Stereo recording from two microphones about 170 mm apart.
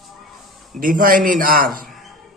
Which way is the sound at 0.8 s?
55° right (ahead or behind).